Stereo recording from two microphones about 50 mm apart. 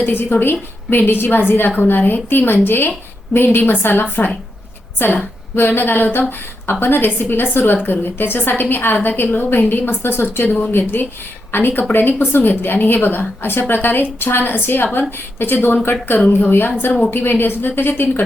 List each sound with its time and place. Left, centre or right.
0.0 s a woman's voice: left